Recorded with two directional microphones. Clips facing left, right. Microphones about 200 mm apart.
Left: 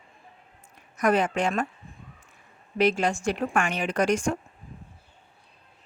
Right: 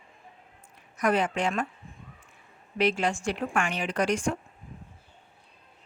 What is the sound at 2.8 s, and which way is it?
Speech, 45° left (ahead or behind).